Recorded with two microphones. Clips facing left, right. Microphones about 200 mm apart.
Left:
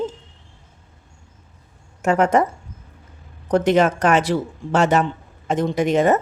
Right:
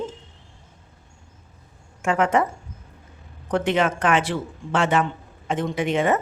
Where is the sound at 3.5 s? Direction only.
40° left (ahead or behind).